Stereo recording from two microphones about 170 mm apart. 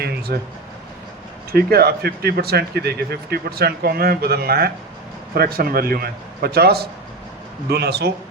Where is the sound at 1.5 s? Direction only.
65° right (ahead or behind).